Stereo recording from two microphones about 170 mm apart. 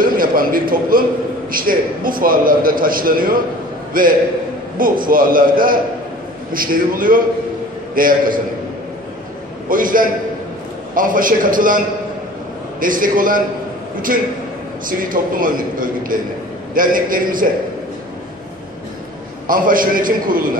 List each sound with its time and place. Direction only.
0.0 s a man's voice: 55° right (ahead or behind)
9.7 s a man's voice: 55° right (ahead or behind)
12.8 s a man's voice: 55° right (ahead or behind)
14.9 s a man's voice: 55° right (ahead or behind)
19.4 s a man's voice: 55° right (ahead or behind)